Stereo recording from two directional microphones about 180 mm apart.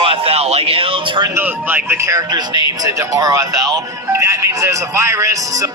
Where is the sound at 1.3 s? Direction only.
10° right (ahead or behind).